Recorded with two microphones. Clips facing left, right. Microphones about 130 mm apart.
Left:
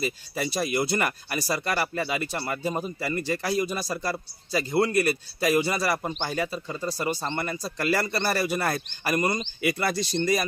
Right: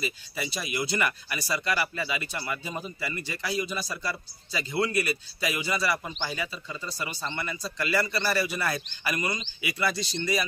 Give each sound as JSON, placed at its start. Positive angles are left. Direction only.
{"t": 0.0, "sound": "speech", "side_deg": 45}